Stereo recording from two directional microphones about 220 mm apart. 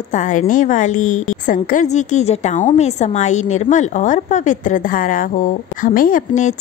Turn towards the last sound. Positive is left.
turn(degrees=35)  # may be behind; listen again after turning